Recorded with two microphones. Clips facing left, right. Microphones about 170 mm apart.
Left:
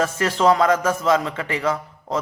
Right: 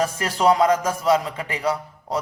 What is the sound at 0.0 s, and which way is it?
Speech, 15° right (ahead or behind).